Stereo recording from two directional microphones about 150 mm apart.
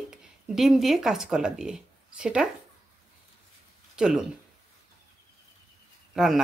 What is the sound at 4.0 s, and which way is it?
Speech, 5° right (ahead or behind).